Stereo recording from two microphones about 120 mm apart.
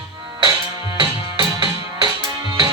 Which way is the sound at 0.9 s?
40° right (ahead or behind).